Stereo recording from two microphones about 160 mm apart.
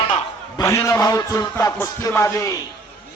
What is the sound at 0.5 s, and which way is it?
Speech, 20° left (ahead or behind).